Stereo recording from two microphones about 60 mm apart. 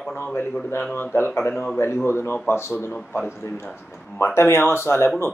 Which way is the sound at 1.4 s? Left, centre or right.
Left.